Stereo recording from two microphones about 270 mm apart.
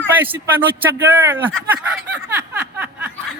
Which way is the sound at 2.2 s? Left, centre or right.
Centre.